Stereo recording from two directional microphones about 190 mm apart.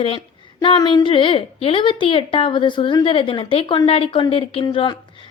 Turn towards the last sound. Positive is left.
turn(degrees=25)  # may be behind; listen again after turning